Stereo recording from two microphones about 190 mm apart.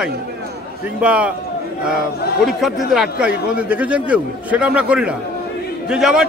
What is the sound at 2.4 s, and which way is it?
A man's voice, centre (ahead or behind).